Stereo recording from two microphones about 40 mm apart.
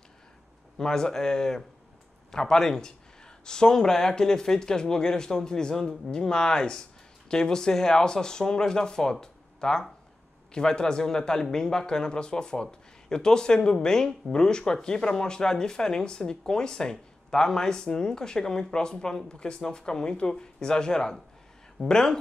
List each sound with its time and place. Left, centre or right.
0.7 s speech: centre